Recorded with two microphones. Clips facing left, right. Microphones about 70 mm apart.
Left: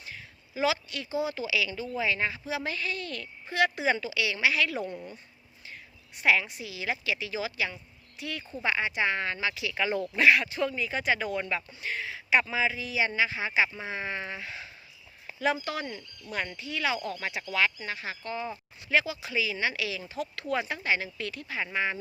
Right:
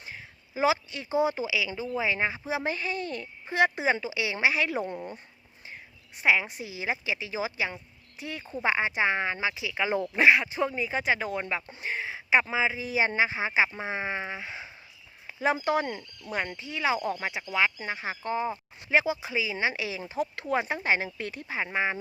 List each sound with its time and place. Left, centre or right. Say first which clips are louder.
0.0 s a sound: right 1 dB; right
1.5 s speech: even; centre; by 5.2 s right
6.4 s speech: right 2 dB; right; by 14.7 s centre
15.5 s speech: right 7 dB; right
16.3 s speech: right 1 dB; right